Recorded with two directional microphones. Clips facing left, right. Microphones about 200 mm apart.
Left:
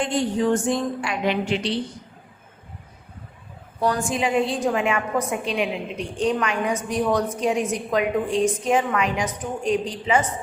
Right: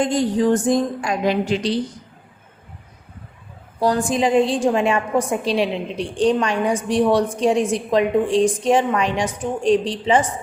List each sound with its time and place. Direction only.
0.0 s a woman's voice: 40° right (ahead or behind)
3.8 s a woman's voice: 35° right (ahead or behind)